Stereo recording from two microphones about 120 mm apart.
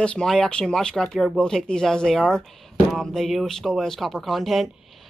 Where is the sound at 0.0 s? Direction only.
5° left (ahead or behind).